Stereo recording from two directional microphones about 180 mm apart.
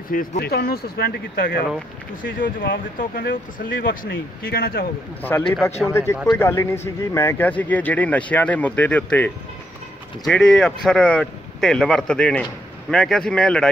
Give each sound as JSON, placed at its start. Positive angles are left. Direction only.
{"t": 0.1, "sound": "speech", "side_deg": 50}
{"t": 3.0, "sound": "speech", "side_deg": 50}
{"t": 5.2, "sound": "speech", "side_deg": 15}